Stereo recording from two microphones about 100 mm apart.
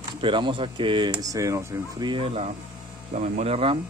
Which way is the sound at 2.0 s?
60° right (ahead or behind).